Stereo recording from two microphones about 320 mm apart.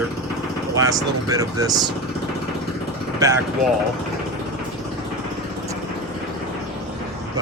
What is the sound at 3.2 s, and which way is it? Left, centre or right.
Speech, centre.